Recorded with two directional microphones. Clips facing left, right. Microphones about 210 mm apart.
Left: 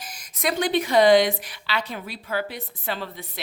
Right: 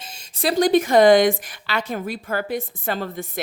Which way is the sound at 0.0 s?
25° right (ahead or behind).